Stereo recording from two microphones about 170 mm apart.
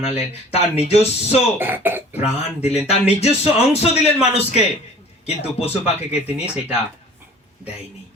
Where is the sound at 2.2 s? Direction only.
40° left (ahead or behind).